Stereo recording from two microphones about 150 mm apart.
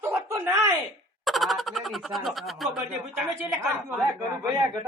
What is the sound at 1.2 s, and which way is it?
Speech, centre (ahead or behind).